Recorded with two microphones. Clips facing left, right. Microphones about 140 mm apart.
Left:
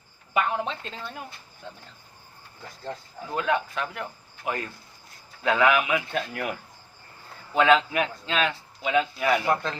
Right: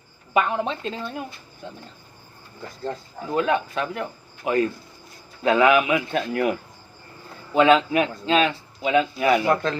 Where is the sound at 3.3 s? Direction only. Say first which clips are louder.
Right 4 dB; 25° right (ahead or behind).